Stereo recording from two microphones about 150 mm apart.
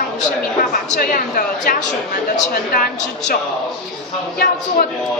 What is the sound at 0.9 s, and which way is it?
A woman's voice, 70° left (ahead or behind).